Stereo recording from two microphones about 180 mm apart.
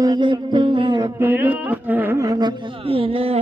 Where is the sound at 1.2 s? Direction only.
10° right (ahead or behind).